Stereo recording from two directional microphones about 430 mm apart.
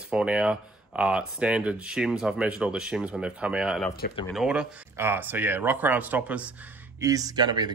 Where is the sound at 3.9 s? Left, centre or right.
Left.